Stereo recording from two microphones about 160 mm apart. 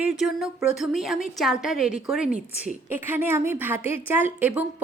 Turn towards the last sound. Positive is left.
turn(degrees=-10)  # may be behind; listen again after turning